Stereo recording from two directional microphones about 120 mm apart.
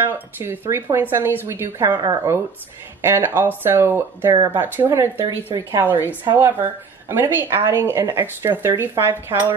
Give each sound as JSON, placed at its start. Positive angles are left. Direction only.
{"t": 0.0, "sound": "speech", "side_deg": -20}